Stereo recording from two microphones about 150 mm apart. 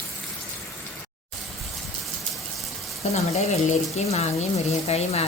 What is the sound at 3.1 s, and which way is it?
Speech, 45° left (ahead or behind).